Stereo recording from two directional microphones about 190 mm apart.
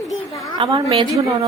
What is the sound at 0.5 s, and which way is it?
Speech, 25° right (ahead or behind).